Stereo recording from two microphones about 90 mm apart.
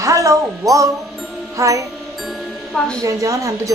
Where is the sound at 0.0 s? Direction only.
35° right (ahead or behind).